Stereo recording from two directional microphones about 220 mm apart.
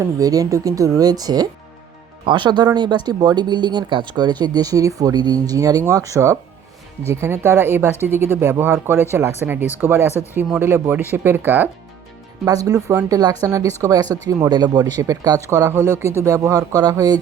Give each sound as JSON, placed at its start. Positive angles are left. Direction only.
{"t": 0.0, "sound": "speech", "side_deg": -15}